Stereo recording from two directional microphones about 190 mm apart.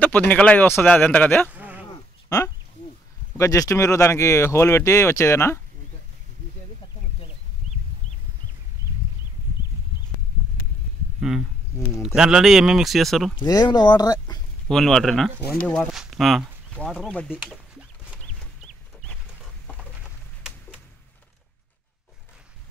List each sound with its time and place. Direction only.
0.3 s speech: 5° left (ahead or behind)
1.5 s sheep: 10° right (ahead or behind)
1.9 s a sound: 15° left (ahead or behind)
3.3 s speech: 15° left (ahead or behind)
11.1 s speech: 5° right (ahead or behind)
13.4 s speech: 20° left (ahead or behind)
14.7 s speech: centre (ahead or behind)
17.3 s a sound: 5° right (ahead or behind)